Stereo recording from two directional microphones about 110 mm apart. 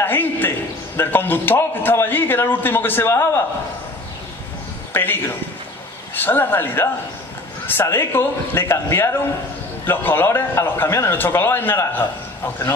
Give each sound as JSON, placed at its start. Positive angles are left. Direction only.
{"t": 0.0, "sound": "a man's voice", "side_deg": 20}
{"t": 4.9, "sound": "a man's voice", "side_deg": 20}